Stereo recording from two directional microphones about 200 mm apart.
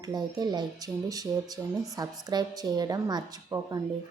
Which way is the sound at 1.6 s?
5° right (ahead or behind).